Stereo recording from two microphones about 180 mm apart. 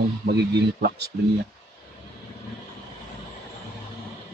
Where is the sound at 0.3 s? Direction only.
65° right (ahead or behind).